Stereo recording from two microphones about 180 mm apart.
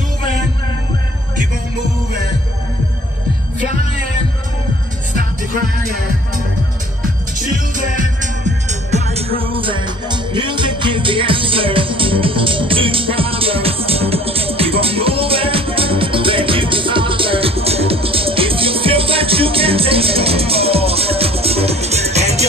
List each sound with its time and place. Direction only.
8.5 s music: 40° right (ahead or behind)
9.4 s music: 30° right (ahead or behind)